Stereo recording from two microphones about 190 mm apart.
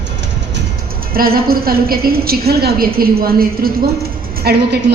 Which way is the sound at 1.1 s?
50° right (ahead or behind).